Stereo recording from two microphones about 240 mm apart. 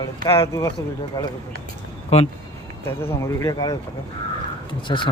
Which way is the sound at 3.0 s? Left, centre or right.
Centre.